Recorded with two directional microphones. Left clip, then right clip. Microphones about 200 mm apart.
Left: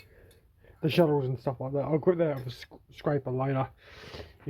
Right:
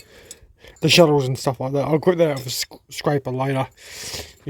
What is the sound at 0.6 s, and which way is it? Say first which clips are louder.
Speech: right 11 dB; 55° right (ahead or behind).